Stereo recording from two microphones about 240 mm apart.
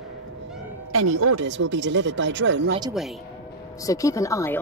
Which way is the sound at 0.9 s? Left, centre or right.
Right.